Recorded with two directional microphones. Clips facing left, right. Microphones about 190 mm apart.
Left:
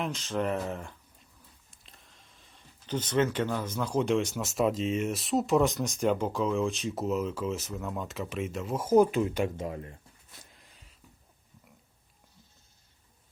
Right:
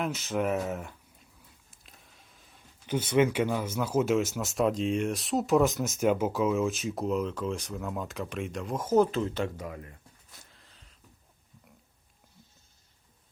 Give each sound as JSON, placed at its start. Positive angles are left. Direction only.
{"t": 0.0, "sound": "speech", "side_deg": -5}
{"t": 9.6, "sound": "speech", "side_deg": 25}
{"t": 10.5, "sound": "a sound", "side_deg": 15}